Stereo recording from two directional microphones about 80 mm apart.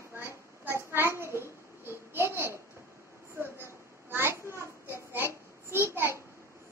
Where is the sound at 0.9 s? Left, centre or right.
Right.